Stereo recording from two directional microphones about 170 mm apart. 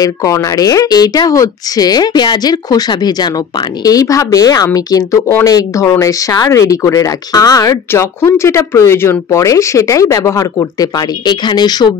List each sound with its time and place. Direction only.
0.0 s a woman's voice: 20° left (ahead or behind)